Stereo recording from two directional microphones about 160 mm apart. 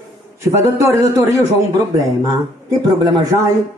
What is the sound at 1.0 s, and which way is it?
A man's voice, 20° right (ahead or behind).